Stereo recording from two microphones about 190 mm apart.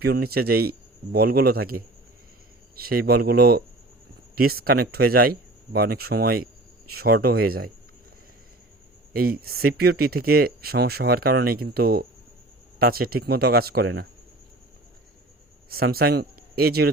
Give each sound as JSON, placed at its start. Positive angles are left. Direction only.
{"t": 0.0, "sound": "speech", "side_deg": -55}
{"t": 9.1, "sound": "speech", "side_deg": -50}
{"t": 15.7, "sound": "speech", "side_deg": -55}